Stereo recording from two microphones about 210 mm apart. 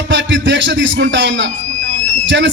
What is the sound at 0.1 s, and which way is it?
A man's voice, 60° right (ahead or behind).